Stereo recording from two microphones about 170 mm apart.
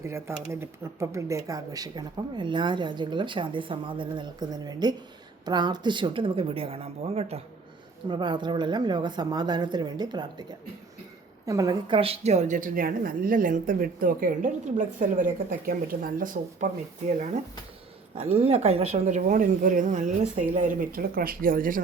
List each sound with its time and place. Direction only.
0.0 s speech: 15° right (ahead or behind)
11.4 s a woman's voice: 20° right (ahead or behind); by 16.7 s 50° right (ahead or behind)
18.1 s speech: 35° right (ahead or behind); by 21.8 s 55° right (ahead or behind)